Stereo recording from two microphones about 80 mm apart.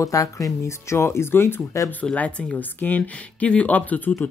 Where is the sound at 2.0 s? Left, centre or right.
Centre.